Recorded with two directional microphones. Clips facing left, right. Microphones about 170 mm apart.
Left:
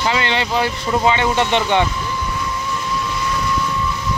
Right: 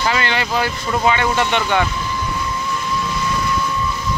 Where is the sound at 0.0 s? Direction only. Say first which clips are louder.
Even; 20° left (ahead or behind).